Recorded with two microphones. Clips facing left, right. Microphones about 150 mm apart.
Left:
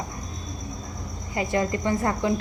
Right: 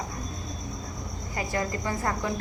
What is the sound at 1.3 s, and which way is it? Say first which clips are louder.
Speech: left 5 dB; 25° left (ahead or behind).